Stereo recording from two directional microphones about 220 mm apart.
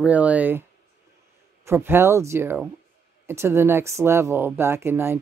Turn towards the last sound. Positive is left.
turn(degrees=-10)  # may be behind; listen again after turning